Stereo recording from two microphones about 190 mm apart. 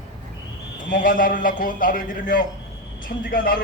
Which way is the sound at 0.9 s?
45° left (ahead or behind).